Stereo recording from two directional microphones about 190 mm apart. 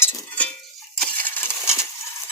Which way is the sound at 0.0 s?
10° left (ahead or behind).